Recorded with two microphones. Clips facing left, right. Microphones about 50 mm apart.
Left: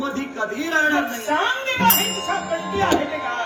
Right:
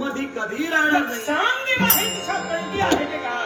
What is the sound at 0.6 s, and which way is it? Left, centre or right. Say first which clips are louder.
Speech: right 1 dB; centre.